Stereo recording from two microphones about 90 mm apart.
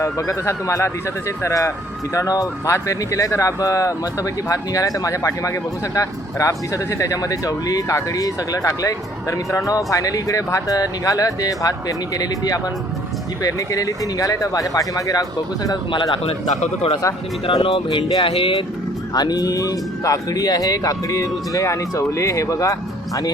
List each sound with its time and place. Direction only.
0.0 s speech: 35° left (ahead or behind)
17.4 s speech: 90° left
19.1 s speech: 50° left (ahead or behind)